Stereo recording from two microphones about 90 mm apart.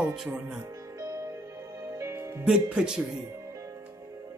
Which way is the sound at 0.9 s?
35° right (ahead or behind).